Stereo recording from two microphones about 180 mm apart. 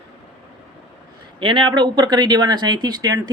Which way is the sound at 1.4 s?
30° right (ahead or behind).